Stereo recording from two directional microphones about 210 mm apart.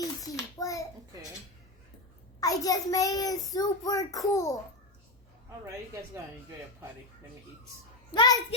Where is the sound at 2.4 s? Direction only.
15° left (ahead or behind).